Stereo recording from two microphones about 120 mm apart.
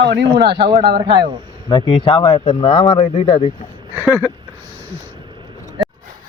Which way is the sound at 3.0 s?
60° left (ahead or behind).